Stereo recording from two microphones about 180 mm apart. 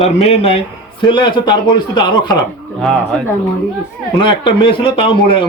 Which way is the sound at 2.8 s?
Centre (ahead or behind).